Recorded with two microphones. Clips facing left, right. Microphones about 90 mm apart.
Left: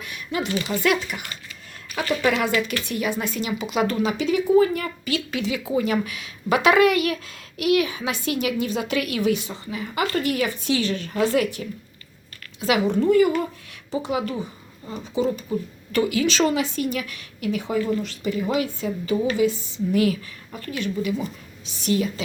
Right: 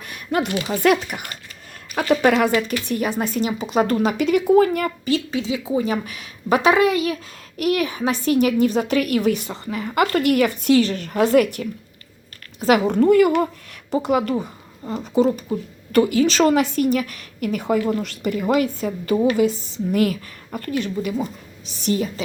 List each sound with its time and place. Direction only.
0.0 s a sound: 45° right (ahead or behind)
0.8 s a woman's voice: 50° right (ahead or behind)
5.0 s a woman's voice: 35° right (ahead or behind)
5.4 s a woman's voice: 20° right (ahead or behind)
6.7 s a woman's voice: 25° right (ahead or behind)
7.5 s a woman's voice: 45° right (ahead or behind)
10.8 s a woman's voice: 50° right (ahead or behind)